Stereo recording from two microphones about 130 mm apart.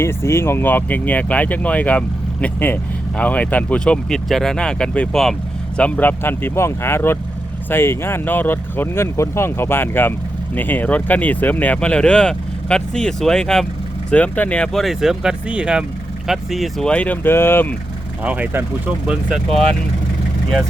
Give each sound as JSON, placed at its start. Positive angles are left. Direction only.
{"t": 0.0, "sound": "speech", "side_deg": 20}
{"t": 18.2, "sound": "speech", "side_deg": -10}